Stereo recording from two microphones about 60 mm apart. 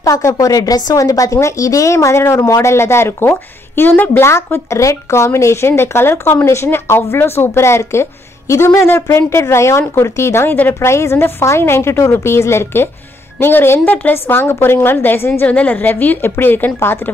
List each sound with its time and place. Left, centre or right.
0.0 s speech: left
4.2 s a woman's voice: left
15.4 s a woman's voice: left